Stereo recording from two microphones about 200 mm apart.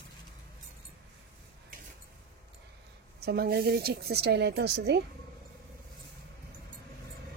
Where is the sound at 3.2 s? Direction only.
50° right (ahead or behind).